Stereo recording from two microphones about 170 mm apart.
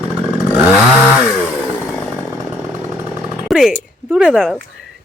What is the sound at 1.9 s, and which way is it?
Chainsaw, centre (ahead or behind).